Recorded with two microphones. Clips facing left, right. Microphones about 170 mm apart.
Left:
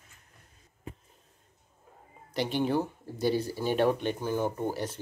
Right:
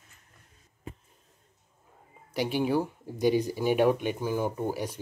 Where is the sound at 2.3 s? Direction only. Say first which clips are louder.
Right 1 dB; 10° right (ahead or behind).